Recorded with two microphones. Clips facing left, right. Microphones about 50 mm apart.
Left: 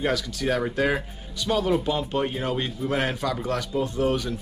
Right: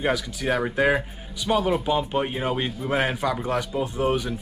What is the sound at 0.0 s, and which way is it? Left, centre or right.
Speech, centre.